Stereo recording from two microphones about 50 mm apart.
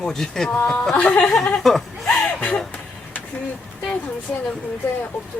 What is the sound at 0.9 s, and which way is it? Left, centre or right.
Speech, left.